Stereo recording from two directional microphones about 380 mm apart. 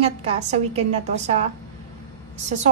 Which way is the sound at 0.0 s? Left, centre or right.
Centre.